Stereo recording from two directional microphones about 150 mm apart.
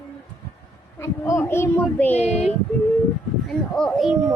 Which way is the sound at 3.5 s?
5° left (ahead or behind).